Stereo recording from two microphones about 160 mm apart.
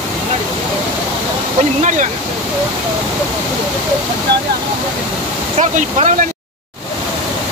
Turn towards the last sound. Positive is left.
turn(degrees=-50)  # may be behind; listen again after turning